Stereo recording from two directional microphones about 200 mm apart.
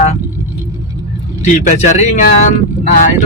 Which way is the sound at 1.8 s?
35° left (ahead or behind).